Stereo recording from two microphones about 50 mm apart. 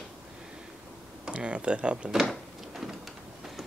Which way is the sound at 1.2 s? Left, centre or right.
Centre.